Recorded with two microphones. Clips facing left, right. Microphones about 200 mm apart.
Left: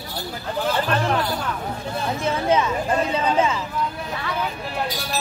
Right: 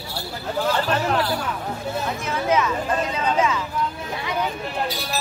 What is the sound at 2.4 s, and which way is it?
Speech, 30° left (ahead or behind).